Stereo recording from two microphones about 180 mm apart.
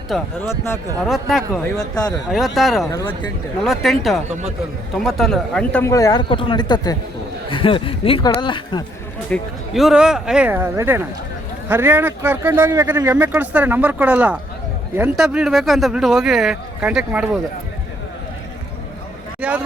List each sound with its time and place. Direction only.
0.1 s speech: centre (ahead or behind)
0.4 s speech: 15° left (ahead or behind)
1.0 s speech: centre (ahead or behind)
1.8 s speech: 20° left (ahead or behind)
2.3 s speech: centre (ahead or behind)
2.9 s speech: 20° left (ahead or behind)
3.6 s speech: centre (ahead or behind)
5.8 s speech: 15° left (ahead or behind)
9.3 s speech: centre (ahead or behind)
19.4 s speech: 5° right (ahead or behind)